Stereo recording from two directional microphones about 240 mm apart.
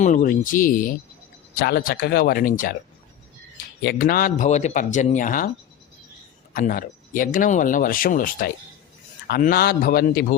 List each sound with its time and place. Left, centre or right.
0.0 s speech: left
3.8 s speech: left
6.5 s speech: left